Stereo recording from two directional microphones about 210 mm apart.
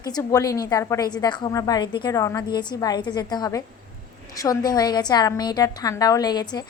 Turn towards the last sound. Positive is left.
turn(degrees=20)  # may be behind; listen again after turning